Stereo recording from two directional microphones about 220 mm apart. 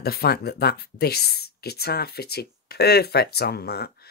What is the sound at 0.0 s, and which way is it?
Speech, 45° left (ahead or behind).